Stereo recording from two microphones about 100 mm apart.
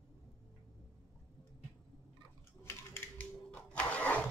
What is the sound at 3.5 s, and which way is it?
Vehicle, 15° left (ahead or behind).